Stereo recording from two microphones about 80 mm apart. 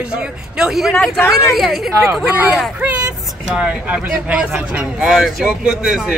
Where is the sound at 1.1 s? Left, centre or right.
Left.